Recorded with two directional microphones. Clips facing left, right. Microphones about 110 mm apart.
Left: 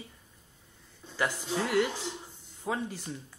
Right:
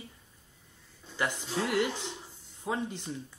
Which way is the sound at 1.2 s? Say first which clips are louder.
Left 1 dB; 5° left (ahead or behind).